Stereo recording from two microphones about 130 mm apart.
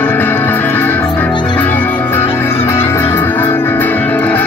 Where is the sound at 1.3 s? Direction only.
35° left (ahead or behind).